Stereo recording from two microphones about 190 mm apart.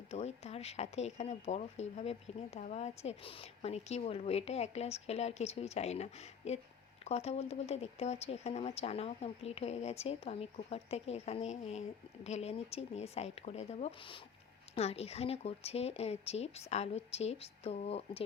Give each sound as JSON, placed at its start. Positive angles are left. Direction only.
{"t": 0.1, "sound": "speech", "side_deg": 35}